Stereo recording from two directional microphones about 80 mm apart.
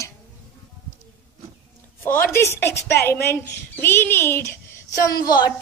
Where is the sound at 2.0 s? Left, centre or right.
Left.